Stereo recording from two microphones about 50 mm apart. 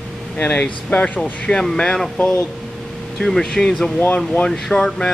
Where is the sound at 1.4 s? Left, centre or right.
Centre.